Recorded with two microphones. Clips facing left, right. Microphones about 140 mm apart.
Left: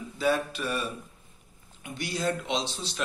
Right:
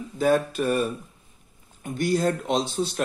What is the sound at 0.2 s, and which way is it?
Speech, 45° right (ahead or behind).